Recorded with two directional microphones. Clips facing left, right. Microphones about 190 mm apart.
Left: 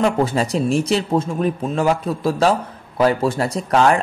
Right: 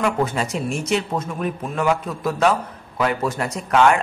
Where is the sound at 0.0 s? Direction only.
30° left (ahead or behind).